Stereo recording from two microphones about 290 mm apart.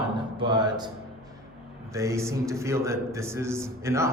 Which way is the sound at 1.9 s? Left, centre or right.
Centre.